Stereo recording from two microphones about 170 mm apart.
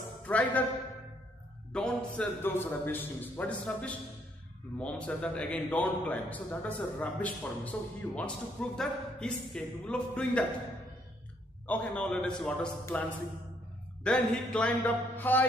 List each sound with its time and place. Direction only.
0.3 s a man's voice: 10° left (ahead or behind)
1.7 s a man's voice: 5° left (ahead or behind)
11.6 s a man's voice: 10° left (ahead or behind)
14.0 s a man's voice: 5° left (ahead or behind)